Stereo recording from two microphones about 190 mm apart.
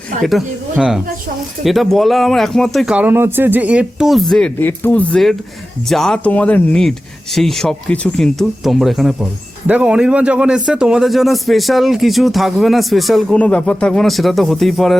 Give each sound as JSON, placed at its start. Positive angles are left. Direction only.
{"t": 0.2, "sound": "speech", "side_deg": 0}